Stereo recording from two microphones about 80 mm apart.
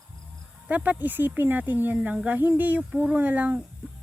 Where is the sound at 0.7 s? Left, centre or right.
Centre.